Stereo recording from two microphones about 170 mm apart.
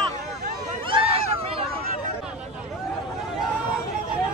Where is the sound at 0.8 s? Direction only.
35° right (ahead or behind).